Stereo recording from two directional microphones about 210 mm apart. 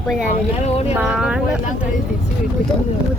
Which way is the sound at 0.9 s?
5° right (ahead or behind).